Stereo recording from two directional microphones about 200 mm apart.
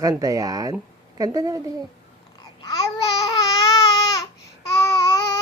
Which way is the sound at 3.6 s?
15° left (ahead or behind).